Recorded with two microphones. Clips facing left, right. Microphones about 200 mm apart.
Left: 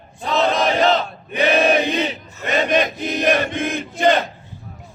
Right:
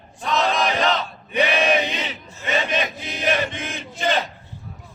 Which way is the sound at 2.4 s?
55° left (ahead or behind).